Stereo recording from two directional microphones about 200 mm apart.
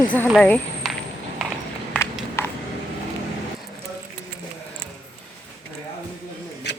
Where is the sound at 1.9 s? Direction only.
10° left (ahead or behind).